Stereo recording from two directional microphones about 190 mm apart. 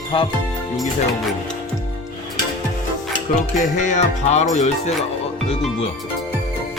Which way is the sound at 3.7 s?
40° left (ahead or behind).